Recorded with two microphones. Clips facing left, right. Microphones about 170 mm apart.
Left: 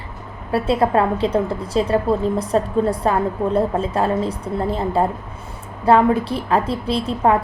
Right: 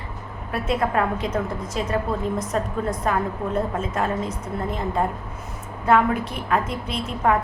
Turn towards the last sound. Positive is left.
turn(degrees=30)  # may be behind; listen again after turning